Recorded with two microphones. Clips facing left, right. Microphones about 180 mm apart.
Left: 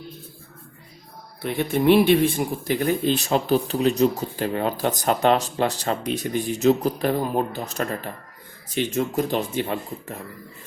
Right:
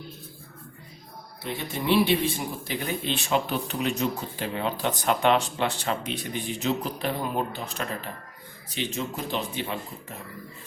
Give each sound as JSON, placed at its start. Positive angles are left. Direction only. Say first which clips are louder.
{"t": 1.4, "sound": "speech", "louder": "left 9 dB", "side_deg": 55}